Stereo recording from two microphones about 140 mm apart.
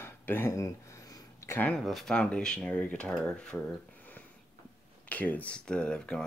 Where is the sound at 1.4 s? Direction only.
20° left (ahead or behind).